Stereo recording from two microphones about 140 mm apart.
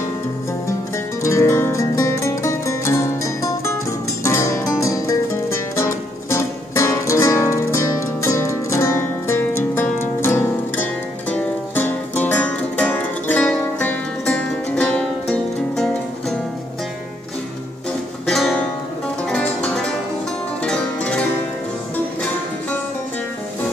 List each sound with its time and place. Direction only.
1.2 s music: 20° left (ahead or behind)
4.2 s music: 20° left (ahead or behind)
18.2 s music: centre (ahead or behind)